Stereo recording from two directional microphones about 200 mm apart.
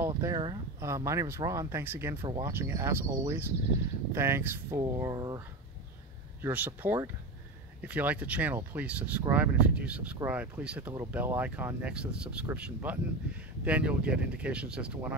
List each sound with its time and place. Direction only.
0.1 s speech: 20° right (ahead or behind)
2.2 s speech: 20° right (ahead or behind)
6.4 s speech: 10° right (ahead or behind)